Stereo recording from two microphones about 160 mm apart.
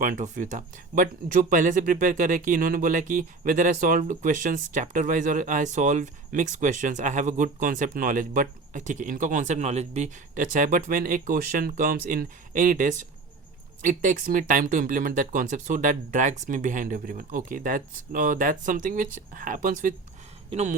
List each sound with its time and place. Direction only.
0.0 s speech: 55° right (ahead or behind)
20.5 s speech: 45° right (ahead or behind)